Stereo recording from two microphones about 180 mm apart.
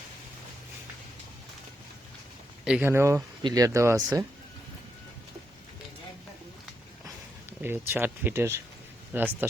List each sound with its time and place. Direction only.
2.6 s speech: 10° right (ahead or behind)
7.6 s speech: 10° right (ahead or behind)